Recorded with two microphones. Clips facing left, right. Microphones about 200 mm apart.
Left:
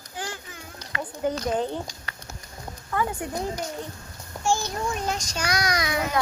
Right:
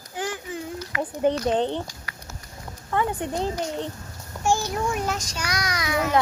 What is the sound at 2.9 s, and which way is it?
Speech, 25° right (ahead or behind).